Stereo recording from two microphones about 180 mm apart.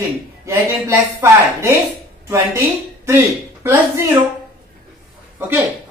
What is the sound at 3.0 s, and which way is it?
Speech, 15° right (ahead or behind).